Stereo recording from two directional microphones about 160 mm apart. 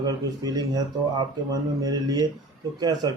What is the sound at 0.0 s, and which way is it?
Speech, 25° right (ahead or behind).